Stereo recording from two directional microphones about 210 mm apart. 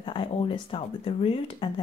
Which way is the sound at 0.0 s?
25° left (ahead or behind).